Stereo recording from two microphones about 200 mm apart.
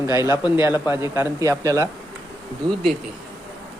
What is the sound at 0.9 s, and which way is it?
Speech, 15° right (ahead or behind).